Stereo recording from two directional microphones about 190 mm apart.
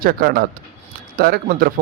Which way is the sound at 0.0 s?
55° right (ahead or behind).